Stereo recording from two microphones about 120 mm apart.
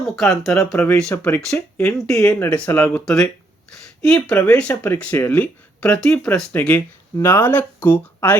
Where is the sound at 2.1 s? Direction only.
5° left (ahead or behind).